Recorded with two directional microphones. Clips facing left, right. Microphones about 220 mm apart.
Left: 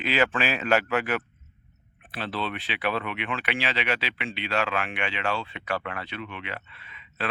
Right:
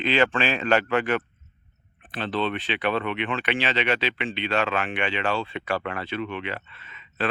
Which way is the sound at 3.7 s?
5° left (ahead or behind).